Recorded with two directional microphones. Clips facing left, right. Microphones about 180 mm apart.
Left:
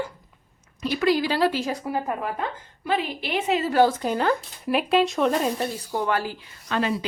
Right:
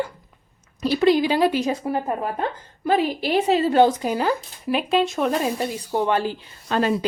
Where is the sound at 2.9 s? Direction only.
40° right (ahead or behind); by 3.9 s 25° right (ahead or behind).